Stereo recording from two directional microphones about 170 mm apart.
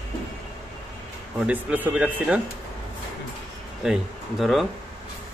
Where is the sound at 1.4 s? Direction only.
10° right (ahead or behind).